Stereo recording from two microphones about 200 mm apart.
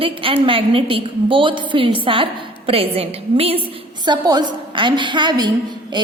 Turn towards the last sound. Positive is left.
turn(degrees=-25)  # may be behind; listen again after turning